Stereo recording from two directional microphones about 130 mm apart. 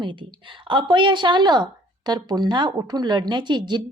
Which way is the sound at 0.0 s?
40° right (ahead or behind).